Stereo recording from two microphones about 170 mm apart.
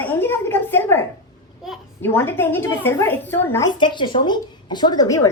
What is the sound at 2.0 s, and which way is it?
A woman's voice, 15° left (ahead or behind).